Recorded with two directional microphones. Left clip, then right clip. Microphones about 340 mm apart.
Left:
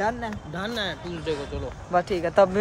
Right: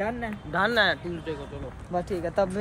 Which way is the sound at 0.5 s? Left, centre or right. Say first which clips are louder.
Right 9 dB; centre.